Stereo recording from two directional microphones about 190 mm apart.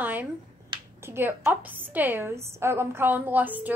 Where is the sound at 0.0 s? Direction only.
10° right (ahead or behind).